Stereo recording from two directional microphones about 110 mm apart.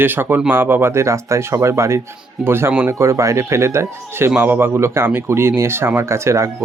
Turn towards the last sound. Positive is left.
turn(degrees=-25)  # may be behind; listen again after turning